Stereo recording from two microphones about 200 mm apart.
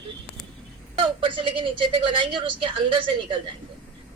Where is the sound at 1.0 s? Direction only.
25° right (ahead or behind).